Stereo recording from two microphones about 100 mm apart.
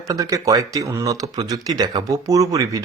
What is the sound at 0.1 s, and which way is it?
Speech, 35° right (ahead or behind).